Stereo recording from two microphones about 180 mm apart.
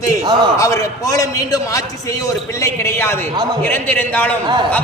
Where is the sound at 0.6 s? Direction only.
15° left (ahead or behind).